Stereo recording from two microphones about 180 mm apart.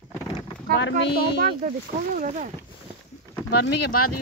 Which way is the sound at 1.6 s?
45° right (ahead or behind).